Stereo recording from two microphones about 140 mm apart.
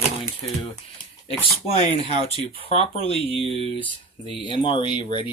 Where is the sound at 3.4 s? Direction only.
45° right (ahead or behind).